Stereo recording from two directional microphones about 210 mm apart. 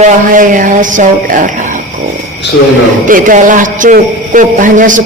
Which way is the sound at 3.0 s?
40° right (ahead or behind).